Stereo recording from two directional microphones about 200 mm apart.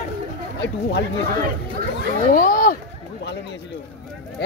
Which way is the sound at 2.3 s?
45° left (ahead or behind).